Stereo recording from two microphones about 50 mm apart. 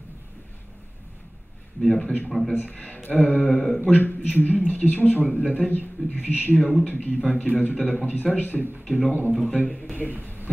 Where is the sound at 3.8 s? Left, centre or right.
Left.